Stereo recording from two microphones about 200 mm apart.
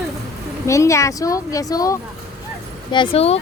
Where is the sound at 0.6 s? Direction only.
15° left (ahead or behind); by 3.4 s 30° left (ahead or behind).